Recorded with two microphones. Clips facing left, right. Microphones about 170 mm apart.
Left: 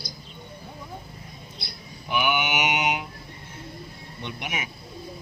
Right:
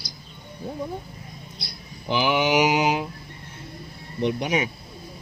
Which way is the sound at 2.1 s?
30° right (ahead or behind).